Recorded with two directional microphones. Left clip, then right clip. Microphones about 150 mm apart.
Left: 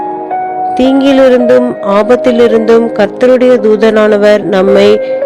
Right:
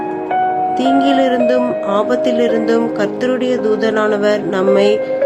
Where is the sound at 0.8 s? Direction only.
60° left (ahead or behind).